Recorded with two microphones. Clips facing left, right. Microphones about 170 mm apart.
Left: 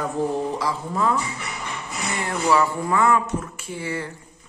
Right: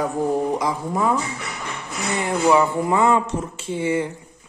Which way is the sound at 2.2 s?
15° right (ahead or behind).